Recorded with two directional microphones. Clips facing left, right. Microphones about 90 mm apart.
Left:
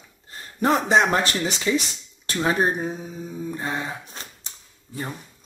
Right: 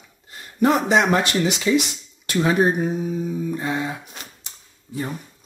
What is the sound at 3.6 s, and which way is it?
Speech, 35° left (ahead or behind).